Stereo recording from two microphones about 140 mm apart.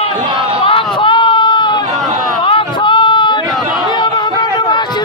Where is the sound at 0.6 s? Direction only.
35° left (ahead or behind).